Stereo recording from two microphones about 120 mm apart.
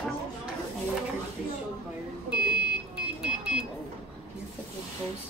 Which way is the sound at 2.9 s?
10° right (ahead or behind).